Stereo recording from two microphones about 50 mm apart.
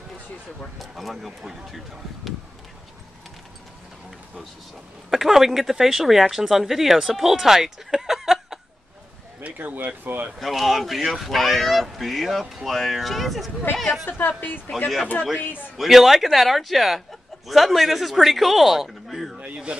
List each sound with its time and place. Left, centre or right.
0.7 s speech: centre
5.1 s speech: centre
9.4 s speech: right
10.4 s speech: centre
14.0 s a woman's voice: left
15.8 s speech: centre
19.4 s speech: right